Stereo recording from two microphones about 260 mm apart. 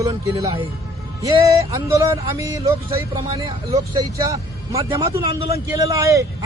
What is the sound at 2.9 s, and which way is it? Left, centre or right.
A man's voice, centre.